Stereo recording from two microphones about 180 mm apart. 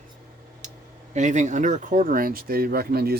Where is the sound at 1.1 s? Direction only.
40° right (ahead or behind); by 3.1 s 60° right (ahead or behind).